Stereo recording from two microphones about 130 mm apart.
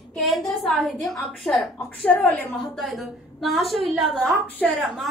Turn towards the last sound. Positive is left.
turn(degrees=0)  # may be behind; listen again after turning